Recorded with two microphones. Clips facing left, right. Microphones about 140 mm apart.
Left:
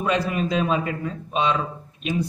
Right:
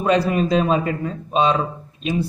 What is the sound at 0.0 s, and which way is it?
A man's voice, 35° right (ahead or behind).